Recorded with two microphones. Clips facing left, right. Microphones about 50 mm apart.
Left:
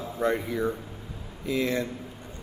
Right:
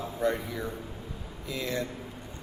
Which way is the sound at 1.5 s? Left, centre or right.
Left.